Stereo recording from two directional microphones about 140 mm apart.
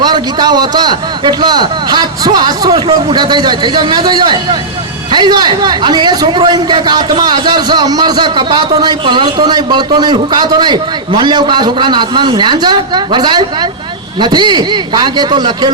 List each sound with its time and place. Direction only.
0.0 s a man's voice: 30° right (ahead or behind)